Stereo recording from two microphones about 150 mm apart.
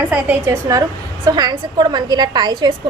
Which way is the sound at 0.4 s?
20° right (ahead or behind).